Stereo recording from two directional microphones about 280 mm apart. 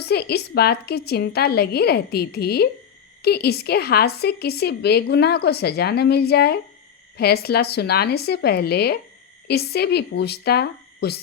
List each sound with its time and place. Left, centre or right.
0.0 s a woman's voice: left